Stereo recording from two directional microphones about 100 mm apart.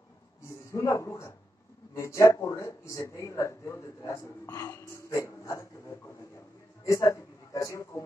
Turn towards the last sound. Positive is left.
turn(degrees=30)  # may be behind; listen again after turning